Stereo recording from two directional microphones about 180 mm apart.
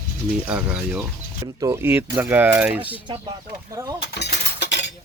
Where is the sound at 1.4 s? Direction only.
20° right (ahead or behind).